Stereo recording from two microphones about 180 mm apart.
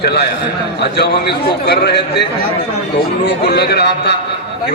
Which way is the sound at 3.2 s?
65° left (ahead or behind).